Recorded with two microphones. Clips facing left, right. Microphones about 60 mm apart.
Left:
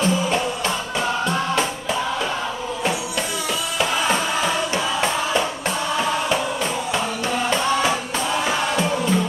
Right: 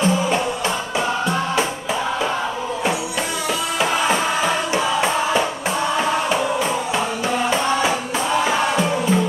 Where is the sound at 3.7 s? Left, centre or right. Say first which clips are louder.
Right 1 dB; right.